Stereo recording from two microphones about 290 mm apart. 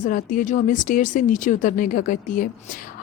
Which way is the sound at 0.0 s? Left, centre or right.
Left.